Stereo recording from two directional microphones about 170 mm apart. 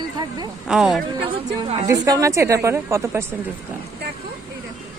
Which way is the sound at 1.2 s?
30° right (ahead or behind).